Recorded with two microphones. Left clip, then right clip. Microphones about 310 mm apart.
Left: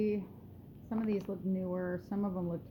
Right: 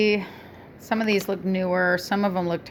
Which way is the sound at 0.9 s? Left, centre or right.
Right.